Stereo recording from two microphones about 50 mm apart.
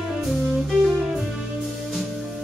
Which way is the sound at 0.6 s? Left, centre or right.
Centre.